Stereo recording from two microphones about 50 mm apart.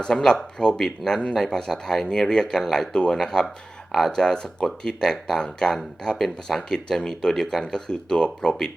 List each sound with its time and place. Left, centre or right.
0.0 s speech: centre
6.7 s speech: centre